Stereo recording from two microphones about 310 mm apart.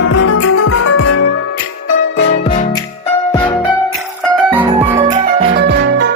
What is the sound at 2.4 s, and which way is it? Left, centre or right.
Music, centre.